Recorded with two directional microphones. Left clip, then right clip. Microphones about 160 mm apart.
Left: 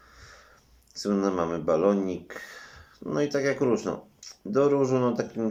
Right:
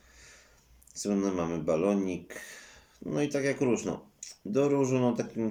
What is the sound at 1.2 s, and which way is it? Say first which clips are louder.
Speech: left 5 dB; 40° right (ahead or behind).